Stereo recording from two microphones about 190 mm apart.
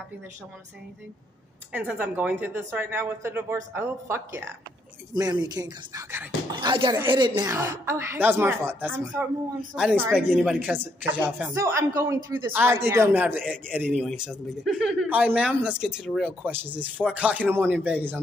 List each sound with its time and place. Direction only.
1.7 s speech: 10° right (ahead or behind)